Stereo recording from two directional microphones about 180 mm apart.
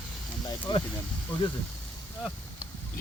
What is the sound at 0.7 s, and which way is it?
Speech, 25° left (ahead or behind).